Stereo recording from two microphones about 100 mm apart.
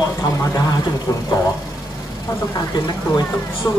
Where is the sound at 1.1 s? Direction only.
35° left (ahead or behind).